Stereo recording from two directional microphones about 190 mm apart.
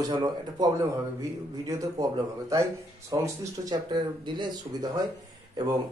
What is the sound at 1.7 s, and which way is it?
Speech, 15° right (ahead or behind).